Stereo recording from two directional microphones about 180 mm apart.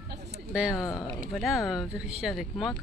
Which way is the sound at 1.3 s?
Centre (ahead or behind).